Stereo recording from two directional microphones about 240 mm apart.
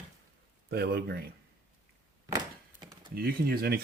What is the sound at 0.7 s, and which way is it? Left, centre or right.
Speech, right.